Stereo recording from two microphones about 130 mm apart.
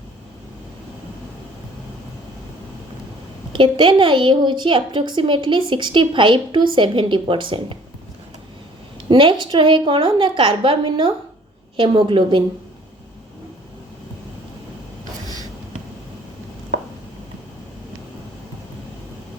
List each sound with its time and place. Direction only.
3.5 s a woman's voice: 40° right (ahead or behind)
9.0 s a woman's voice: 40° right (ahead or behind)